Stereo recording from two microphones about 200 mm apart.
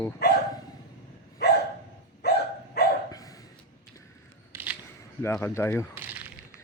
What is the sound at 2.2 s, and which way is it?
Dog, 55° left (ahead or behind).